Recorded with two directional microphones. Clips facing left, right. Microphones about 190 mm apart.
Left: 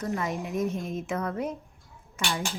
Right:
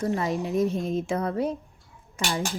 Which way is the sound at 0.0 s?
30° right (ahead or behind).